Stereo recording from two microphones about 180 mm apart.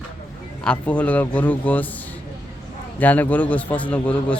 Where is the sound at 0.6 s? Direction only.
5° left (ahead or behind).